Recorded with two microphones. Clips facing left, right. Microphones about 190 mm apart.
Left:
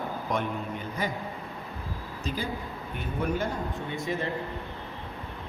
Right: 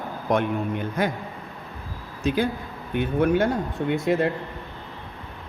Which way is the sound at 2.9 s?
70° right (ahead or behind).